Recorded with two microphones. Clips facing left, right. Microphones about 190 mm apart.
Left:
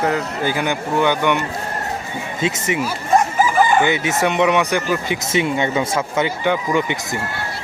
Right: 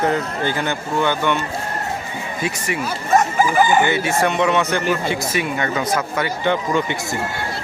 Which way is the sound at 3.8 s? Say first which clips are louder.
Even; 20° left (ahead or behind).